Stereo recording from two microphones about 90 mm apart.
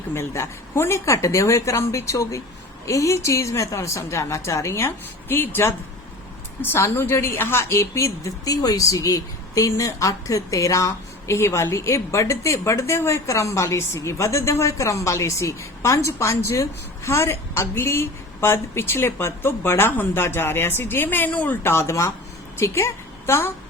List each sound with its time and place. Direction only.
0.1 s a woman's voice: 30° left (ahead or behind)
21.6 s a woman's voice: 30° left (ahead or behind)